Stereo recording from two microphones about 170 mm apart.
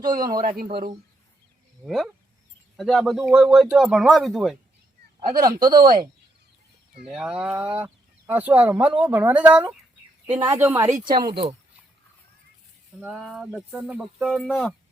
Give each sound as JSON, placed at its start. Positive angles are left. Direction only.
{"t": 0.0, "sound": "speech", "side_deg": -55}
{"t": 1.8, "sound": "speech", "side_deg": 0}
{"t": 5.3, "sound": "speech", "side_deg": -60}
{"t": 7.0, "sound": "speech", "side_deg": -5}
{"t": 11.3, "sound": "speech", "side_deg": -30}
{"t": 13.1, "sound": "speech", "side_deg": 0}